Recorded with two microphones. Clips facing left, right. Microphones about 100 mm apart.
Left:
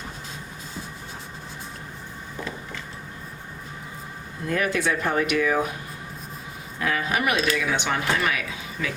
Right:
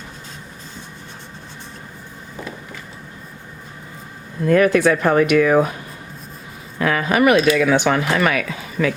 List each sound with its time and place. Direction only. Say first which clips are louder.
4.4 s speech: right 10 dB; 70° right (ahead or behind)
6.7 s speech: right 8 dB; 70° right (ahead or behind)